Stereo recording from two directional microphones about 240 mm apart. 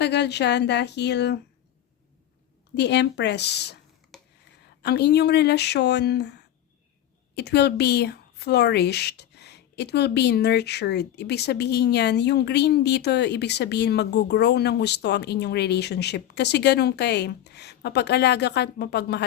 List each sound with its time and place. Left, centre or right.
0.0 s a woman's voice: left
2.7 s a woman's voice: left
4.1 s a sound: centre
4.8 s a woman's voice: left